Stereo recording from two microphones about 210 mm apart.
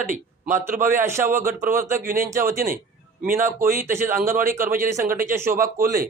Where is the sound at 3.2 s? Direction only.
10° right (ahead or behind).